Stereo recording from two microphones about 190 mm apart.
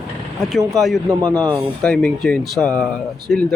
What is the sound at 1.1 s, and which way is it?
Speech, 20° right (ahead or behind).